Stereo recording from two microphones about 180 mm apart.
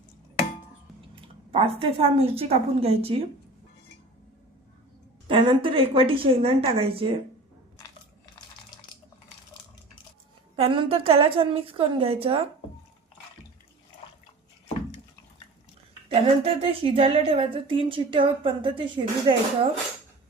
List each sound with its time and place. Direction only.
1.1 s a woman's voice: 30° right (ahead or behind)
5.3 s a woman's voice: 30° right (ahead or behind)
10.6 s a woman's voice: 30° right (ahead or behind)
16.0 s a woman's voice: 30° right (ahead or behind)